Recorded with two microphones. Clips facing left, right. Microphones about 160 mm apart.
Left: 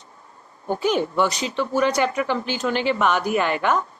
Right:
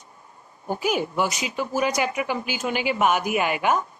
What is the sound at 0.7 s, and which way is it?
Speech, 10° right (ahead or behind).